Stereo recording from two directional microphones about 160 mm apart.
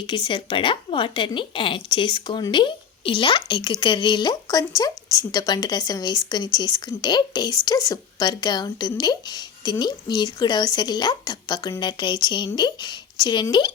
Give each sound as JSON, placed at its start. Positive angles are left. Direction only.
{"t": 0.1, "sound": "a woman's voice", "side_deg": 30}